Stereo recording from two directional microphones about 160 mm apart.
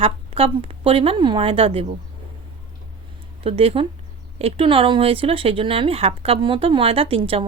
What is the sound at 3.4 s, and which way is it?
Speech, 35° right (ahead or behind).